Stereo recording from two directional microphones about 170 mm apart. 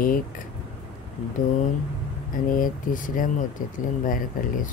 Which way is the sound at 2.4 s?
55° left (ahead or behind).